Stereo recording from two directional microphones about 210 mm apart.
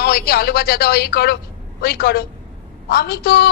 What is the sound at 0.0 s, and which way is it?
A woman's voice, 50° left (ahead or behind).